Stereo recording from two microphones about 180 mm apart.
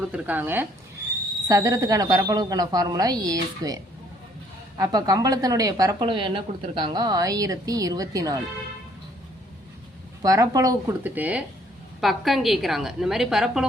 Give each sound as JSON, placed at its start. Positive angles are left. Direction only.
{"t": 0.0, "sound": "a woman's voice", "side_deg": -5}
{"t": 4.8, "sound": "a woman's voice", "side_deg": -20}
{"t": 10.2, "sound": "a woman's voice", "side_deg": -20}